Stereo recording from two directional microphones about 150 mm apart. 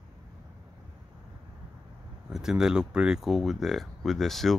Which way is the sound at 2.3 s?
5° right (ahead or behind).